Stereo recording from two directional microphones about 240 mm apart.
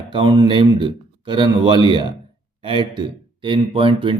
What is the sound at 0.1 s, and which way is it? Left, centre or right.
A man's voice, centre.